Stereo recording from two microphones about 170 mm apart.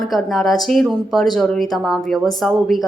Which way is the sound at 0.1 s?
Centre (ahead or behind).